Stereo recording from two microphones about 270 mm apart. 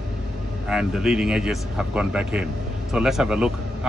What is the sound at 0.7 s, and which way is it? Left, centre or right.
Speech, centre.